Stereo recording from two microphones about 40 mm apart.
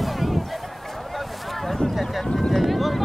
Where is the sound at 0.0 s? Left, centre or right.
Centre.